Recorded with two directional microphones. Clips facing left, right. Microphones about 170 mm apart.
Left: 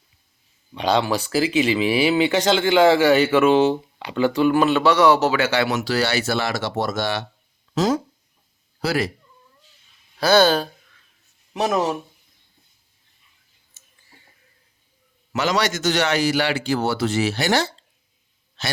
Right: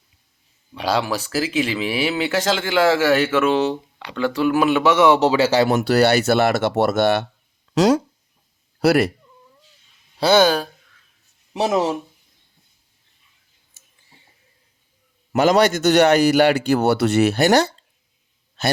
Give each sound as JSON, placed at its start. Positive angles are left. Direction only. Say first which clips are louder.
{"t": 0.7, "sound": "a man's voice", "louder": "left 1 dB", "side_deg": -5}
{"t": 5.5, "sound": "a man's voice", "louder": "right 5 dB", "side_deg": -45}
{"t": 7.8, "sound": "speech", "louder": "right 5 dB", "side_deg": -75}
{"t": 10.2, "sound": "speech", "louder": "right 1 dB", "side_deg": -25}
{"t": 10.4, "sound": "a man's voice", "louder": "right 1 dB", "side_deg": -10}
{"t": 11.5, "sound": "speech", "louder": "right 2 dB", "side_deg": -25}
{"t": 15.3, "sound": "a man's voice", "louder": "right 6 dB", "side_deg": -50}